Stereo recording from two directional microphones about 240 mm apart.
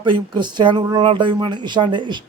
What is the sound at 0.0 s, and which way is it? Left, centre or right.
Speech, centre.